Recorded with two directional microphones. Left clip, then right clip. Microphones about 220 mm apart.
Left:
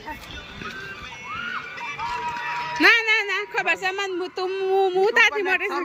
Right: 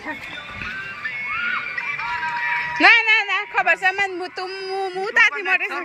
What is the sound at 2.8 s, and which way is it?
Speech, 10° left (ahead or behind).